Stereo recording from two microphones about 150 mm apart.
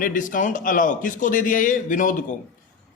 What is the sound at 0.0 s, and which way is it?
A man's voice, 60° left (ahead or behind).